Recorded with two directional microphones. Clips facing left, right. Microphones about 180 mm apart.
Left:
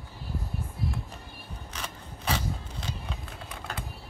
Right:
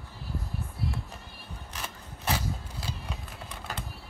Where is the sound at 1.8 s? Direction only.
5° right (ahead or behind).